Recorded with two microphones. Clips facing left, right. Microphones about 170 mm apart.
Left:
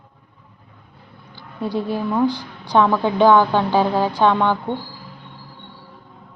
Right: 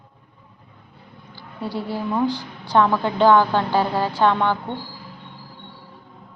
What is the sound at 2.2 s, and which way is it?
A woman's voice, 15° left (ahead or behind).